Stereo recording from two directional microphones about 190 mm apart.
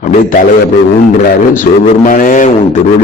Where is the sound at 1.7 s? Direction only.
40° left (ahead or behind).